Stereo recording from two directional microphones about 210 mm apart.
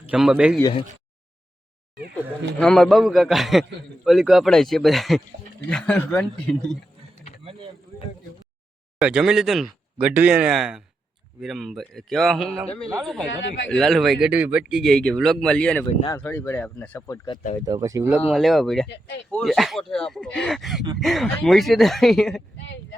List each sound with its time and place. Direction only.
0.1 s a man's voice: 5° right (ahead or behind)
2.6 s a man's voice: 5° left (ahead or behind)
9.0 s a man's voice: 5° right (ahead or behind)
17.7 s speech: 15° right (ahead or behind)
18.2 s a man's voice: centre (ahead or behind)
18.9 s speech: 55° left (ahead or behind)
19.3 s a man's voice: centre (ahead or behind)
22.5 s a sound: 60° left (ahead or behind)